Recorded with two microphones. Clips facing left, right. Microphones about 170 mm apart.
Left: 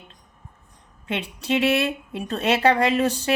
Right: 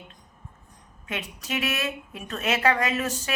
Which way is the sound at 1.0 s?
30° left (ahead or behind).